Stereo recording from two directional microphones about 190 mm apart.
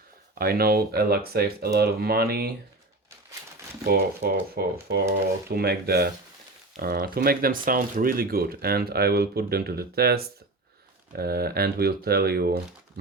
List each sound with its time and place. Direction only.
0.3 s speech: 55° right (ahead or behind)
3.8 s speech: 55° right (ahead or behind)